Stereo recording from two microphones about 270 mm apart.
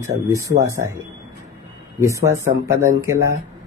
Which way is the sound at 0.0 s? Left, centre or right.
Centre.